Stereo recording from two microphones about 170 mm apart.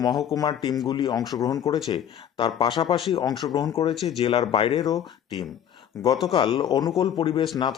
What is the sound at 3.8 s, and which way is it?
Speech, 35° left (ahead or behind).